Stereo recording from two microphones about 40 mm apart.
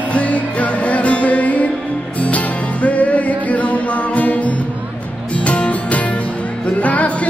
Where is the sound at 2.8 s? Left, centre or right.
Left.